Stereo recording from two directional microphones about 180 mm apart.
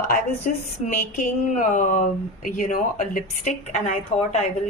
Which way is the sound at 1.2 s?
40° left (ahead or behind).